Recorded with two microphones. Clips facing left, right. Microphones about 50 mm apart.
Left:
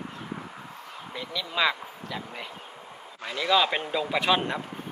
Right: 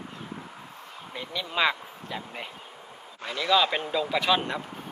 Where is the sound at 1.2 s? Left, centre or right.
Right.